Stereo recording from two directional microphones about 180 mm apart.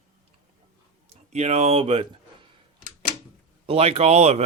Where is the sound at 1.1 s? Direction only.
35° right (ahead or behind).